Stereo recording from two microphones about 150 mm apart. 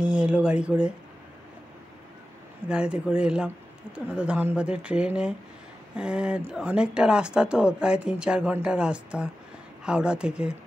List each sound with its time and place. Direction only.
0.0 s speech: 5° right (ahead or behind)
2.7 s speech: 5° right (ahead or behind)